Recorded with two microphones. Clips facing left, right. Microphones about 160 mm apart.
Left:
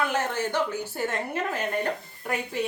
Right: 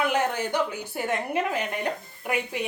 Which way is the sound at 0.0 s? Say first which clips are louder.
Right 2 dB; 15° right (ahead or behind).